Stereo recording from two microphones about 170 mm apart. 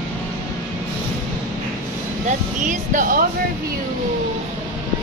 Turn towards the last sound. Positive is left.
turn(degrees=-50)  # may be behind; listen again after turning